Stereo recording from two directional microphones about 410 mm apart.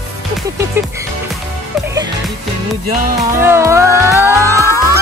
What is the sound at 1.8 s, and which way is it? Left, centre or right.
Music, centre.